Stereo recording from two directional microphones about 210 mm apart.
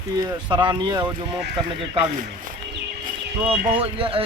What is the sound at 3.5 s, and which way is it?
Speech, 25° right (ahead or behind).